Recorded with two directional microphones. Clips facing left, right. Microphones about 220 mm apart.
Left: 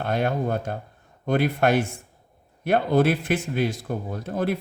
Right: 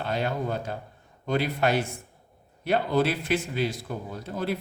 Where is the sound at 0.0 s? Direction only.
55° left (ahead or behind).